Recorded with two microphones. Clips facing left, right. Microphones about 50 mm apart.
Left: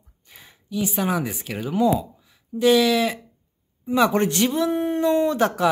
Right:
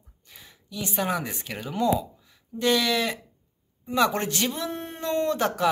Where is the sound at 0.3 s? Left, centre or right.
Left.